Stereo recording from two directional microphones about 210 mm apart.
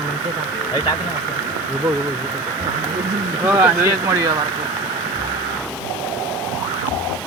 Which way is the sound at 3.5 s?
10° right (ahead or behind).